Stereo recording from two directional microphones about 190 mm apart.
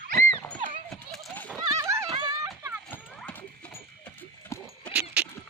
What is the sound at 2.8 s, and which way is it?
Clip-clop, 10° left (ahead or behind).